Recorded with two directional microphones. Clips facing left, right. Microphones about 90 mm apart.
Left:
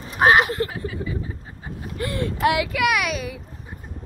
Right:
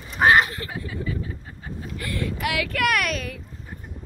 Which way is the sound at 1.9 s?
25° left (ahead or behind).